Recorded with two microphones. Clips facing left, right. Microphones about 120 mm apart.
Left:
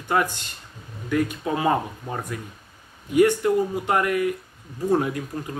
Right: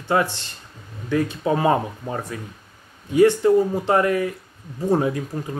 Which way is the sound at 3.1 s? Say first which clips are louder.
Right 3 dB; 30° right (ahead or behind).